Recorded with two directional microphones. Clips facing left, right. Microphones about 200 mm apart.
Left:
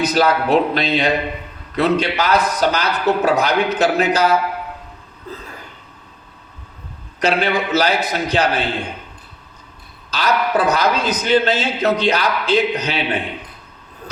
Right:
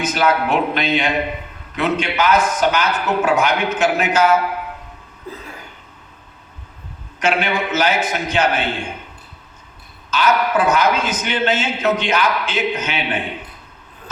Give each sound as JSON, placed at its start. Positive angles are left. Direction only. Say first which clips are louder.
{"t": 0.0, "sound": "a man's voice", "louder": "left 2 dB", "side_deg": 35}
{"t": 7.2, "sound": "a man's voice", "louder": "left 2 dB", "side_deg": 35}
{"t": 10.1, "sound": "a man's voice", "louder": "right 1 dB", "side_deg": 35}